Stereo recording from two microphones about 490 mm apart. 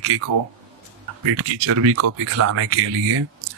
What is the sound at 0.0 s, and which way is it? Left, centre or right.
Speech, right.